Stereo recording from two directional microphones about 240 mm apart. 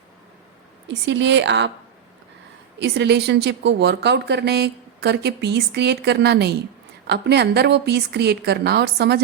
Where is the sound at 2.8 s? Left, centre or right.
Right.